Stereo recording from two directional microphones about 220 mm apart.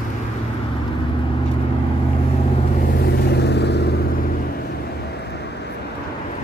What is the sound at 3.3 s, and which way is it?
Vehicle, 50° left (ahead or behind).